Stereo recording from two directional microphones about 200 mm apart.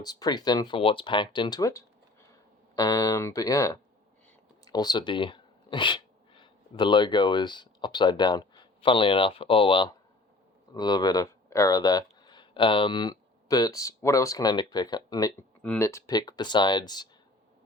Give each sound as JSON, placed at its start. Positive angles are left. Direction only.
{"t": 0.0, "sound": "speech", "side_deg": 20}